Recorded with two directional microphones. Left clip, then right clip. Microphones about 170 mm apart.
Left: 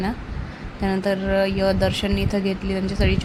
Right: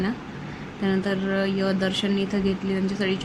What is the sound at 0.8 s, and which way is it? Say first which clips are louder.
Speech: left 3 dB; 25° left (ahead or behind).